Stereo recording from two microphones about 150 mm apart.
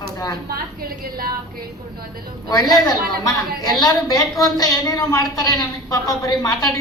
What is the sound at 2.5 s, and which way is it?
A woman's voice, 25° left (ahead or behind).